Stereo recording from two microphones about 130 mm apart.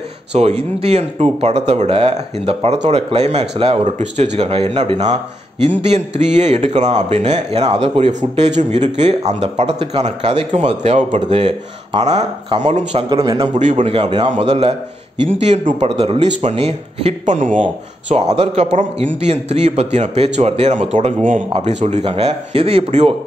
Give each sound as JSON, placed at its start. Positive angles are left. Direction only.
{"t": 0.3, "sound": "speech", "side_deg": -55}
{"t": 5.0, "sound": "a man's voice", "side_deg": -60}
{"t": 7.8, "sound": "speech", "side_deg": -45}
{"t": 8.1, "sound": "a man's voice", "side_deg": -65}
{"t": 13.1, "sound": "a man's voice", "side_deg": -40}
{"t": 13.6, "sound": "speech", "side_deg": -70}
{"t": 13.8, "sound": "speech", "side_deg": -45}
{"t": 14.3, "sound": "a man's voice", "side_deg": -60}
{"t": 16.5, "sound": "a man's voice", "side_deg": -50}